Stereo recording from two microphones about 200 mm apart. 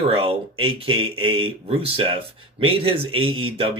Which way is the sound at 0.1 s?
30° right (ahead or behind).